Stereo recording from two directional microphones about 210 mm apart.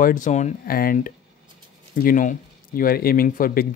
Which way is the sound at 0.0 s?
40° left (ahead or behind).